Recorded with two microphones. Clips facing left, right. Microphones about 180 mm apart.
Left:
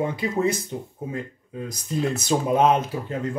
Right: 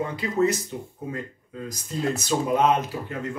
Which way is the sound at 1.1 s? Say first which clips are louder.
Left 2 dB; 20° left (ahead or behind).